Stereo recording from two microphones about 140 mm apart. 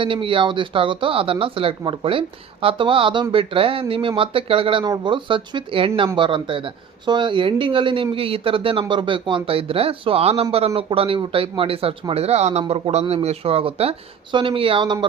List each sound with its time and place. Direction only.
0.0 s speech: 40° right (ahead or behind)